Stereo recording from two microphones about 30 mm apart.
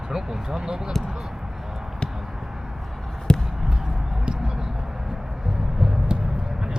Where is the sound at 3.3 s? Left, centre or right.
Left.